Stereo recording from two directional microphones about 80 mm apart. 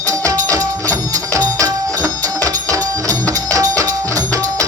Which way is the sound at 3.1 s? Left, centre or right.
Right.